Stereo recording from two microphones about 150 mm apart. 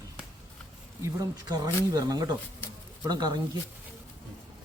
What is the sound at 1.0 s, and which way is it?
Speech, 25° right (ahead or behind).